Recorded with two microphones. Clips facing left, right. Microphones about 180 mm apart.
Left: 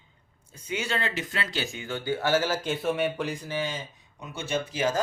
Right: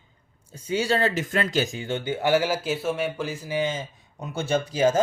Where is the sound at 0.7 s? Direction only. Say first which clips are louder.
Right 7 dB; 35° right (ahead or behind).